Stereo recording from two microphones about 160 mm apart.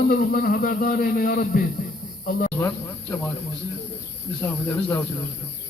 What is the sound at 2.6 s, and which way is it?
Speech, 15° left (ahead or behind).